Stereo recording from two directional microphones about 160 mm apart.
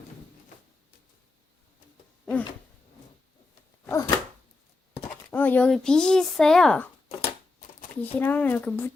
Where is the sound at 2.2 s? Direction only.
10° left (ahead or behind).